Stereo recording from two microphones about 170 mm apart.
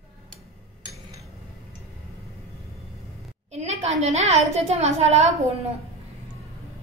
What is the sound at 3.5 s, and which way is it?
A woman's voice, 40° right (ahead or behind).